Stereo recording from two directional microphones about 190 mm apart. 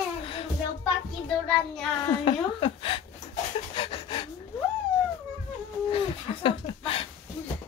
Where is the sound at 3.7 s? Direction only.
25° left (ahead or behind).